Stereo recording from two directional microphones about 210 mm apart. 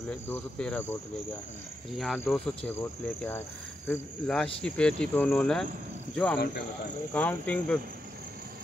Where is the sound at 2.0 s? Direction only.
Centre (ahead or behind).